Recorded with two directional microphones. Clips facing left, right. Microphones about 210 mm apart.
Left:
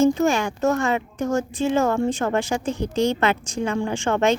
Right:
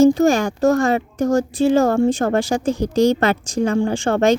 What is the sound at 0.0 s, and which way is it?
Speech, 35° right (ahead or behind).